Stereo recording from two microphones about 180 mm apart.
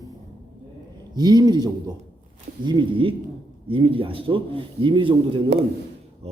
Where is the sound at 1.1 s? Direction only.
25° right (ahead or behind).